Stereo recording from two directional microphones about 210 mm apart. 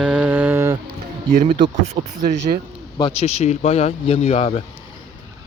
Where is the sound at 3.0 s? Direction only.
30° left (ahead or behind).